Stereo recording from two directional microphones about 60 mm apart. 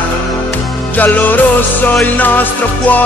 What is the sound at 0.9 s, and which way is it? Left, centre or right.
Music, left.